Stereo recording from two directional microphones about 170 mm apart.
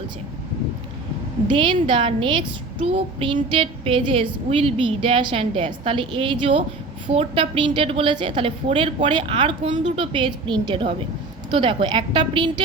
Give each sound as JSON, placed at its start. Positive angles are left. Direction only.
{"t": 1.5, "sound": "a woman's voice", "side_deg": -30}